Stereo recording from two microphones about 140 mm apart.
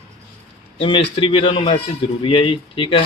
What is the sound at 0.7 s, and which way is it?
Speech, 40° left (ahead or behind).